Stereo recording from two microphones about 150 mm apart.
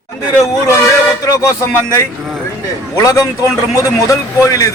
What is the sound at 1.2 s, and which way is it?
Speech, 25° left (ahead or behind).